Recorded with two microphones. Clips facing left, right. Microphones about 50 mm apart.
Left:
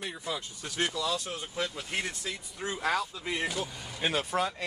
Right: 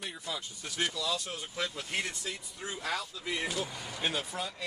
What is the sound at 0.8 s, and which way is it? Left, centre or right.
Speech, left.